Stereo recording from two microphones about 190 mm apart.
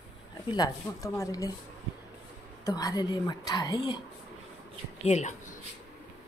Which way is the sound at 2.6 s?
20° left (ahead or behind).